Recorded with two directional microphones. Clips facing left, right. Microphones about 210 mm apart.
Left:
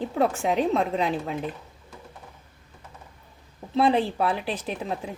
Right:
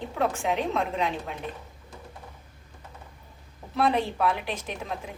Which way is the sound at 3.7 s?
30° left (ahead or behind).